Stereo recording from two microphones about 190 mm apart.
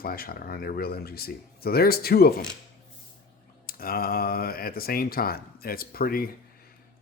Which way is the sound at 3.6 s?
50° left (ahead or behind).